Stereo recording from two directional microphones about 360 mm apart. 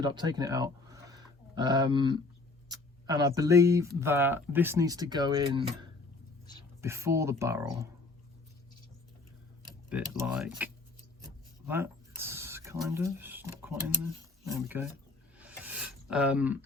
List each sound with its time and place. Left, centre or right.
0.0 s speech: centre
9.6 s speech: centre
11.7 s a sound: centre
14.5 s speech: centre
15.4 s rub: centre